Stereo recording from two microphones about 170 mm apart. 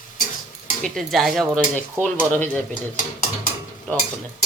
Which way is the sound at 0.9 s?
Centre (ahead or behind).